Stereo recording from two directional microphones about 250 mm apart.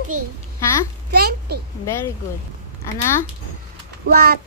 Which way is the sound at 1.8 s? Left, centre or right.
Centre.